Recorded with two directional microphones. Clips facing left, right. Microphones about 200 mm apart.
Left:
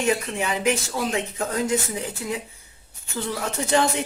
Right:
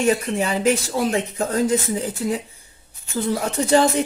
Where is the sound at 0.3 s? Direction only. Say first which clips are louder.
Right 4 dB; 35° right (ahead or behind).